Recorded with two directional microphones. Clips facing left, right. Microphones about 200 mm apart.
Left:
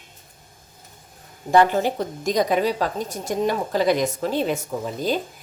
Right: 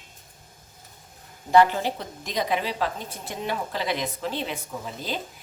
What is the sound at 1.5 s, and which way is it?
A woman's voice, 50° left (ahead or behind).